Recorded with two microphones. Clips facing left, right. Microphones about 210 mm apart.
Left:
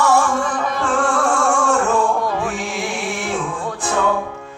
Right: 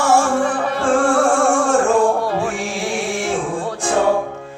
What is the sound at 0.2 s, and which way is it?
Music, 35° right (ahead or behind).